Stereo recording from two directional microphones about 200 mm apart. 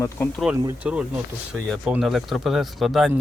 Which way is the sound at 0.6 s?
5° right (ahead or behind).